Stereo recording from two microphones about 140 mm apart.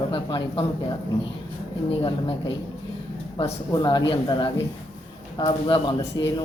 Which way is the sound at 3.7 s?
30° left (ahead or behind).